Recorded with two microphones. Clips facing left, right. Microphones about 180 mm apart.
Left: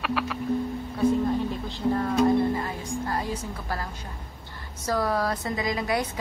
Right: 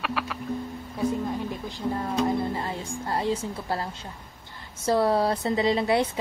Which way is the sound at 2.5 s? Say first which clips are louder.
Left 2 dB; 25° right (ahead or behind).